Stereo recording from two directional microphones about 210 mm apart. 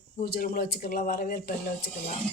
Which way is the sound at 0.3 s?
45° left (ahead or behind).